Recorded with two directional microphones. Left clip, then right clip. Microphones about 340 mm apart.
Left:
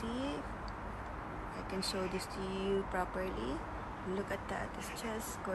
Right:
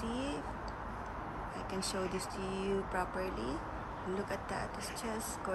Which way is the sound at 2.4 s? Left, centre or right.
Right.